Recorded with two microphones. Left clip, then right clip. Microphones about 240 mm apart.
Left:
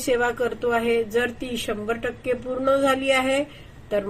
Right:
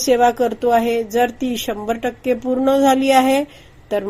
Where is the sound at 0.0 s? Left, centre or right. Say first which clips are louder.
Right 8 dB; right.